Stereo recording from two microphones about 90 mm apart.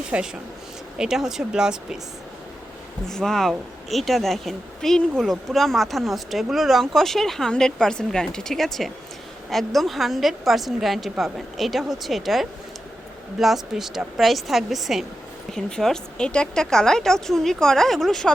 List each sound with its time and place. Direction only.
0.1 s speech: 15° right (ahead or behind)
0.9 s speech: 5° right (ahead or behind)
3.1 s speech: 5° left (ahead or behind)